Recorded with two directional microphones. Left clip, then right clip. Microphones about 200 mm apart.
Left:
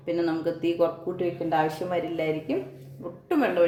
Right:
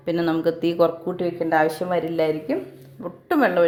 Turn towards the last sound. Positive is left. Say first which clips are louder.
# right 4 dB
turn(degrees=-40)  # may be behind; listen again after turning